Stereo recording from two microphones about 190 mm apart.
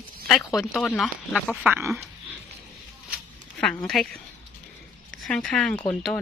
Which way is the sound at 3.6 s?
5° left (ahead or behind).